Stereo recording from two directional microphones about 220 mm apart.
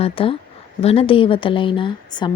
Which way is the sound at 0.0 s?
25° left (ahead or behind).